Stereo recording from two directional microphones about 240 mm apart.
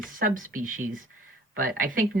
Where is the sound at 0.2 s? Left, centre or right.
Right.